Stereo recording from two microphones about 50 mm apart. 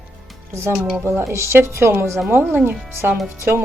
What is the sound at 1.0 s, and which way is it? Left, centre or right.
Speech, right.